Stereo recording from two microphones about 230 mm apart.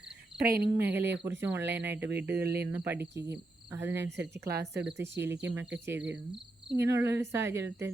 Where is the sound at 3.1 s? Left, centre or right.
Centre.